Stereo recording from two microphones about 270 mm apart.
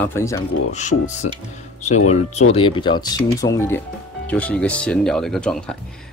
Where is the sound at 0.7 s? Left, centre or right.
Left.